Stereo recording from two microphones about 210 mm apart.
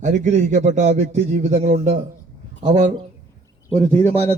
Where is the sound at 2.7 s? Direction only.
20° right (ahead or behind).